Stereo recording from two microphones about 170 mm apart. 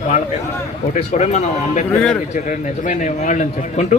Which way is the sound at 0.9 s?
45° left (ahead or behind).